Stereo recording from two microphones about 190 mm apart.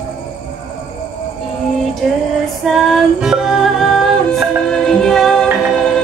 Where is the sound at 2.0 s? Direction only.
Centre (ahead or behind).